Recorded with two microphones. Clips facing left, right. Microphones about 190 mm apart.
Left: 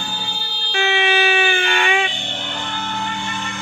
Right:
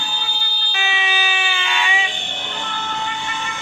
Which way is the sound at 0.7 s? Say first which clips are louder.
Left 7 dB; 60° left (ahead or behind).